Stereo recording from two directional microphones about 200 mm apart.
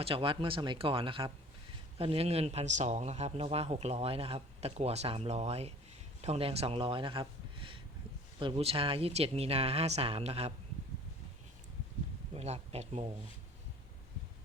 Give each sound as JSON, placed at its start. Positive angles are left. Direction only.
{"t": 0.0, "sound": "a man's voice", "side_deg": -25}
{"t": 12.3, "sound": "a man's voice", "side_deg": -30}